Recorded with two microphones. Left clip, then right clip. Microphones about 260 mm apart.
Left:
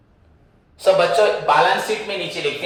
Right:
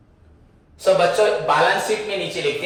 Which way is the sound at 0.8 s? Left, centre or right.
Left.